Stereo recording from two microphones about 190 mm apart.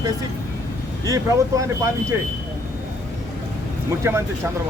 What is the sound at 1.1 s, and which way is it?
Speech, 15° right (ahead or behind).